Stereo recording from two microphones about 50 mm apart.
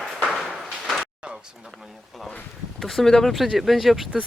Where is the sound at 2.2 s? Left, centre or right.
Centre.